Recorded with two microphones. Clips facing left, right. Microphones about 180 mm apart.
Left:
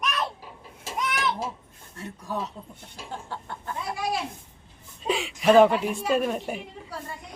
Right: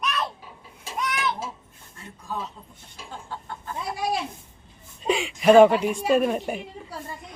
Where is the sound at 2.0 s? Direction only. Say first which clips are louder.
Left 2 dB; 70° left (ahead or behind).